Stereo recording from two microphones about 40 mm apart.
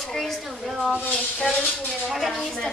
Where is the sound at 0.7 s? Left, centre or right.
Centre.